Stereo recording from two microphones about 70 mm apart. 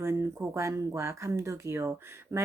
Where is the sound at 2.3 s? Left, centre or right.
Right.